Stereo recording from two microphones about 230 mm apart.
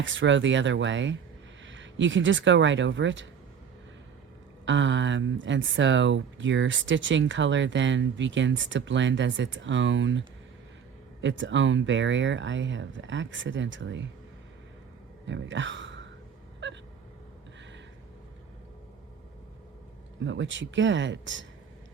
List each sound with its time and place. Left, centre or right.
0.0 s speech: right
4.6 s speech: right
15.3 s speech: right
16.6 s gasp: right
20.2 s speech: right